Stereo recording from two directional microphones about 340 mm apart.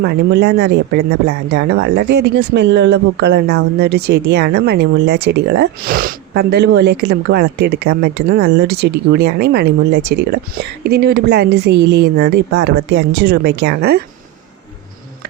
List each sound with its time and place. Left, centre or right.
0.0 s speech: right